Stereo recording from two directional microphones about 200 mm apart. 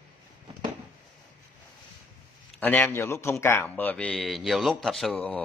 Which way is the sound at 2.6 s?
10° left (ahead or behind).